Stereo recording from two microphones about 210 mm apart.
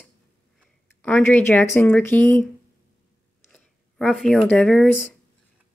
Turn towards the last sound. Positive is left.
turn(degrees=5)  # may be behind; listen again after turning